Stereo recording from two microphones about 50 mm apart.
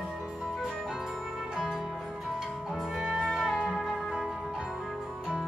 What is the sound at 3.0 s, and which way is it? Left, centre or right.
Music, centre.